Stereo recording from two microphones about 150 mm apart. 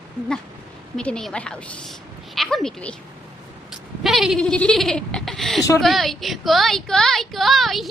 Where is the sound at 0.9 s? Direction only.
5° left (ahead or behind).